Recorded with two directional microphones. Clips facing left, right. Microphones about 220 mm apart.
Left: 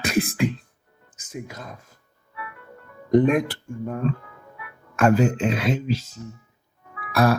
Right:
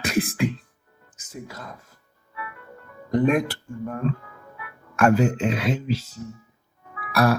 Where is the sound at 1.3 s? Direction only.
20° left (ahead or behind).